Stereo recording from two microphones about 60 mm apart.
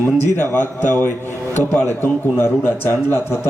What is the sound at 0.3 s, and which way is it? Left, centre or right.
Speech, left.